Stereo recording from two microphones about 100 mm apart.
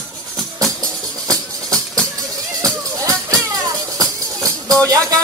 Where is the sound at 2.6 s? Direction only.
35° right (ahead or behind).